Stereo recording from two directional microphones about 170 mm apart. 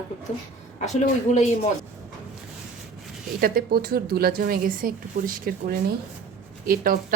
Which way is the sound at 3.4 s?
60° right (ahead or behind).